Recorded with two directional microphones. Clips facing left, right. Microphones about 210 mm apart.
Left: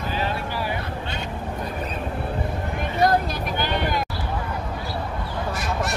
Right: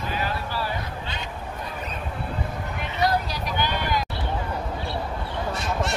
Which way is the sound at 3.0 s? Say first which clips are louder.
Left 4 dB; 50° left (ahead or behind).